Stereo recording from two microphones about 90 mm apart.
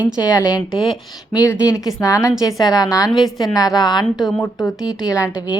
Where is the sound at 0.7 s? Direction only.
60° left (ahead or behind).